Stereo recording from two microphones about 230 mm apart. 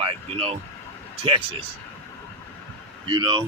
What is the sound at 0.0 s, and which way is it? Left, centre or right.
Vehicle, right.